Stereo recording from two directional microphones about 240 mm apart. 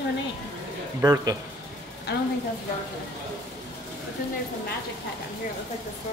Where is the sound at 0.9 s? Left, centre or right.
Centre.